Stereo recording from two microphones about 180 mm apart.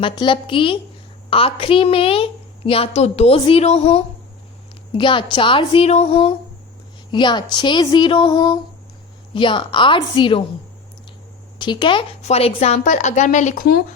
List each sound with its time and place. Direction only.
0.0 s a woman's voice: 30° left (ahead or behind)
11.6 s a woman's voice: 25° left (ahead or behind); by 13.7 s 45° left (ahead or behind)